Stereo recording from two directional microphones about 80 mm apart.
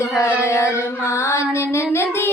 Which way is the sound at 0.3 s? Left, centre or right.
Left.